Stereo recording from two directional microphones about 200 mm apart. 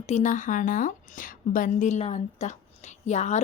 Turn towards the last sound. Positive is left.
turn(degrees=35)  # may be behind; listen again after turning